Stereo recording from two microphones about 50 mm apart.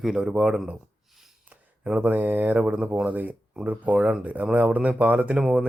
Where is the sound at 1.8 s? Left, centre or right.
Right.